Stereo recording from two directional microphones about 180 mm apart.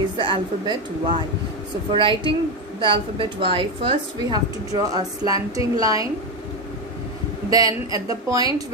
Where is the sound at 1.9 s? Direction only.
30° right (ahead or behind).